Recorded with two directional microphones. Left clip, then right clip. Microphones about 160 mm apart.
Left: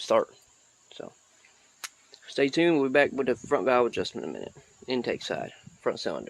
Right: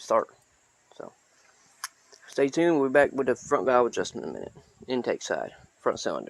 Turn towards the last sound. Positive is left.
turn(degrees=5)  # may be behind; listen again after turning